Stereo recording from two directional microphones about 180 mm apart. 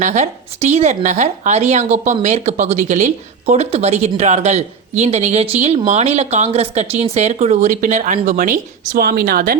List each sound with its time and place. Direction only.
0.0 s speech: 40° right (ahead or behind)